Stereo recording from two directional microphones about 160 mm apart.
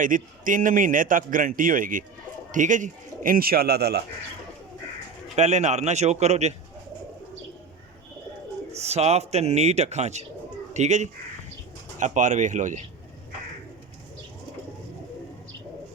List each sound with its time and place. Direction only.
0.0 s a man's voice: 55° right (ahead or behind); by 4.0 s 85° right
5.4 s a man's voice: 45° right (ahead or behind)
8.7 s a man's voice: 40° right (ahead or behind)